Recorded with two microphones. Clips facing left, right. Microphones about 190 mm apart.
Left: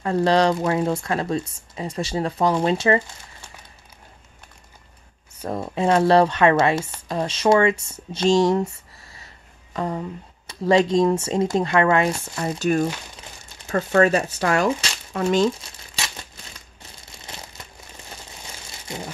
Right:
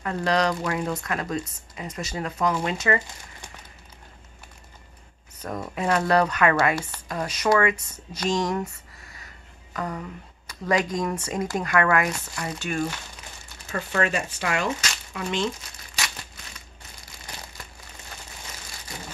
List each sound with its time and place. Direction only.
0.0 s speech: 30° left (ahead or behind)
5.4 s speech: 30° left (ahead or behind)
12.5 s speech: 40° left (ahead or behind)
17.0 s crumpling: 25° left (ahead or behind)
18.7 s crumpling: 25° left (ahead or behind)